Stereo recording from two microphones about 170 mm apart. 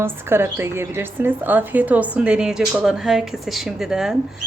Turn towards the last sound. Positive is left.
turn(degrees=-5)  # may be behind; listen again after turning